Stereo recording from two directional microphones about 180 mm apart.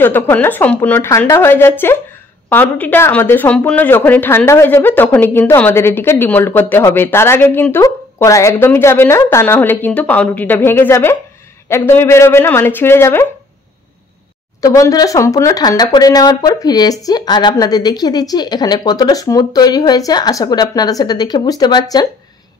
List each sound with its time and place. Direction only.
0.0 s speech: 10° left (ahead or behind)
14.6 s speech: 20° left (ahead or behind)